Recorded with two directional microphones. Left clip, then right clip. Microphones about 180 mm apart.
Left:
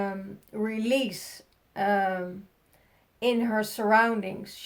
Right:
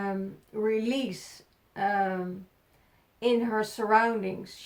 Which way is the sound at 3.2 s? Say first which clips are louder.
Even; 40° left (ahead or behind).